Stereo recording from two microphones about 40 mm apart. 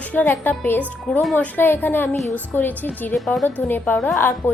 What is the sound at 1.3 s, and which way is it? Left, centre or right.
A woman's voice, left.